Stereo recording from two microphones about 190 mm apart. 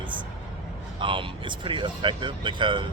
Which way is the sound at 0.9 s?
25° right (ahead or behind).